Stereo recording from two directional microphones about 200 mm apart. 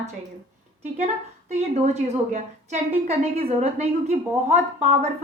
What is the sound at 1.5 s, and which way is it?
A woman's voice, 35° right (ahead or behind).